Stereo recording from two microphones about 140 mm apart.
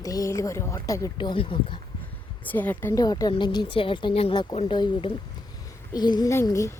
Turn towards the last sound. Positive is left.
turn(degrees=20)  # may be behind; listen again after turning